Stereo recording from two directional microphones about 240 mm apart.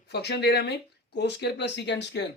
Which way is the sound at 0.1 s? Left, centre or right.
Left.